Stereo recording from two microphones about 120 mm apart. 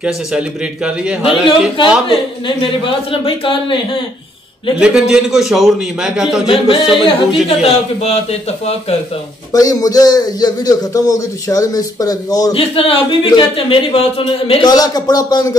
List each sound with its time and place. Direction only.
0.0 s a man's voice: 10° right (ahead or behind)
1.2 s speech: 45° left (ahead or behind)
4.7 s a man's voice: 5° right (ahead or behind)
7.4 s a man's voice: 60° left (ahead or behind)
9.5 s a man's voice: 30° left (ahead or behind)
12.5 s speech: 50° left (ahead or behind)
14.7 s a man's voice: 35° left (ahead or behind)